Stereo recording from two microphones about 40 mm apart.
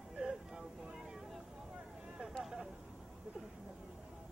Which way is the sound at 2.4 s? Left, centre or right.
Centre.